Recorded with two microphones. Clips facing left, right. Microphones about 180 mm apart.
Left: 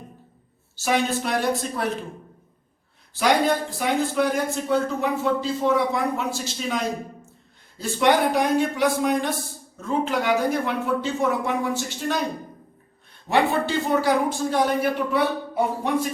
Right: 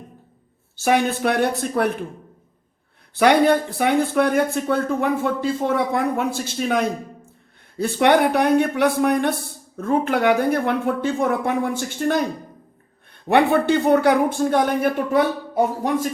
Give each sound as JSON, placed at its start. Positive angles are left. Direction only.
{"t": 0.8, "sound": "speech", "side_deg": -55}
{"t": 3.2, "sound": "speech", "side_deg": -60}
{"t": 13.2, "sound": "speech", "side_deg": -60}